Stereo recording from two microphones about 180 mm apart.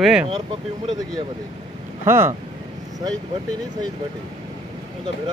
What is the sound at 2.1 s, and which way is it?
Speech, 15° right (ahead or behind).